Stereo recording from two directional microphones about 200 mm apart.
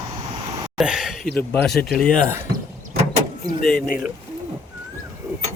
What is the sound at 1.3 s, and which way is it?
Speech, 10° left (ahead or behind).